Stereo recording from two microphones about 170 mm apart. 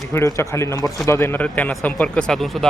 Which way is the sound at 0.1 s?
20° left (ahead or behind).